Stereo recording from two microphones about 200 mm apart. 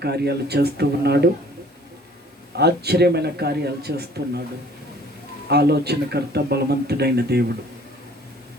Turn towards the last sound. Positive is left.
turn(degrees=-55)  # may be behind; listen again after turning